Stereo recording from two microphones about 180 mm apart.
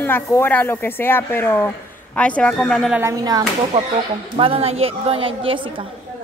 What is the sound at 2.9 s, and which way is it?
Speech, 15° right (ahead or behind).